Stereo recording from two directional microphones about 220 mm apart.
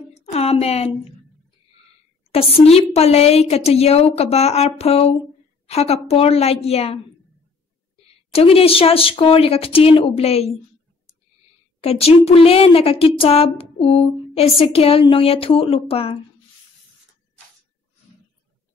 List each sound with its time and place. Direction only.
0.1 s speech: 30° left (ahead or behind)
2.3 s speech: 25° left (ahead or behind)
8.3 s speech: 25° left (ahead or behind)
11.8 s speech: 25° left (ahead or behind)